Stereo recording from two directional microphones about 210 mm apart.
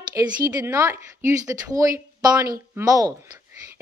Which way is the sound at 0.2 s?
10° right (ahead or behind).